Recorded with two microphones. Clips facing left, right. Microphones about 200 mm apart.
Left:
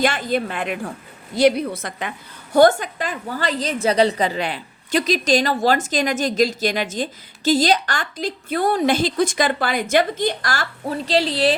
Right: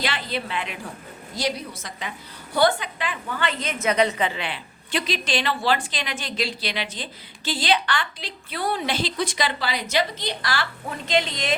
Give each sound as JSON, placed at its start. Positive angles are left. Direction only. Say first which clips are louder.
{"t": 0.0, "sound": "a woman's voice", "louder": "left 8 dB", "side_deg": 50}